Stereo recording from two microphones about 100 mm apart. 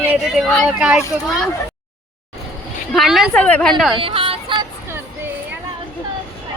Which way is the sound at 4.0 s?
65° right (ahead or behind).